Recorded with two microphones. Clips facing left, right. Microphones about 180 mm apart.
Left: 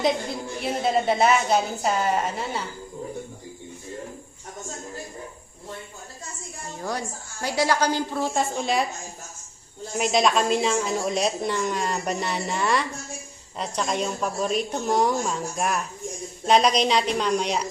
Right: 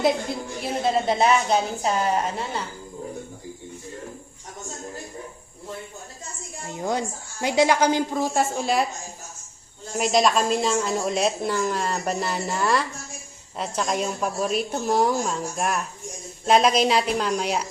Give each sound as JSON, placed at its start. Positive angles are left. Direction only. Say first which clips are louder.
{"t": 0.6, "sound": "a woman's voice", "louder": "even", "side_deg": 0}
{"t": 6.7, "sound": "a woman's voice", "louder": "right 4 dB", "side_deg": -20}
{"t": 8.3, "sound": "a woman's voice", "louder": "right 2 dB", "side_deg": -5}
{"t": 9.9, "sound": "a woman's voice", "louder": "right 1 dB", "side_deg": 0}